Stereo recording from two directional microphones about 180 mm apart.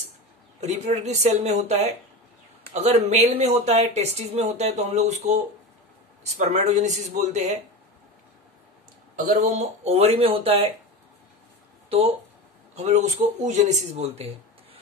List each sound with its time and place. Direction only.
0.6 s speech: 40° right (ahead or behind)
9.1 s speech: 40° right (ahead or behind)
12.7 s speech: 40° right (ahead or behind)